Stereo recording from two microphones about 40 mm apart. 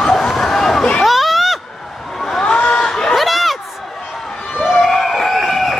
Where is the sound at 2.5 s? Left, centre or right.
Left.